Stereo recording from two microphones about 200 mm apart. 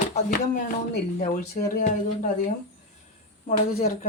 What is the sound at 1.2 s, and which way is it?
Speech, 40° left (ahead or behind).